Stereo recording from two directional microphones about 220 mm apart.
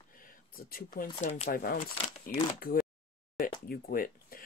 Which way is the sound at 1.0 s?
30° left (ahead or behind).